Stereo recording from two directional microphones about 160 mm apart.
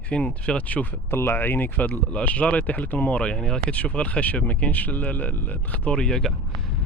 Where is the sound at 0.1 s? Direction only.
5° left (ahead or behind).